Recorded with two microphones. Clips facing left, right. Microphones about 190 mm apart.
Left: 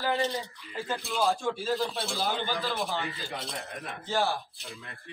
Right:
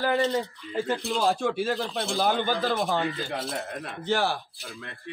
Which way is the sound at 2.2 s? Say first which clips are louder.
Right 6 dB; 55° right (ahead or behind).